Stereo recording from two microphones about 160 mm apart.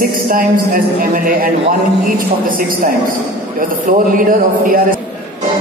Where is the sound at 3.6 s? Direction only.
60° right (ahead or behind).